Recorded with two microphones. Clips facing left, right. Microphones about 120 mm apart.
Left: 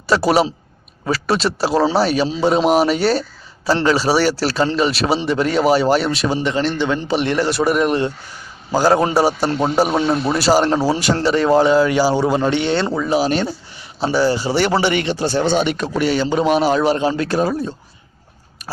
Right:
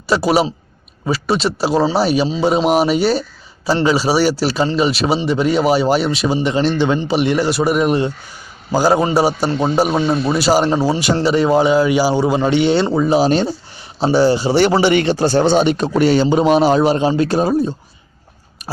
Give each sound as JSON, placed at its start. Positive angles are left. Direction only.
{"t": 0.1, "sound": "a man's voice", "side_deg": 0}
{"t": 6.7, "sound": "a man's voice", "side_deg": -20}
{"t": 7.1, "sound": "a man's voice", "side_deg": -10}
{"t": 11.1, "sound": "a man's voice", "side_deg": -10}
{"t": 13.0, "sound": "a man's voice", "side_deg": -25}
{"t": 15.0, "sound": "speech", "side_deg": -40}
{"t": 16.2, "sound": "a man's voice", "side_deg": -20}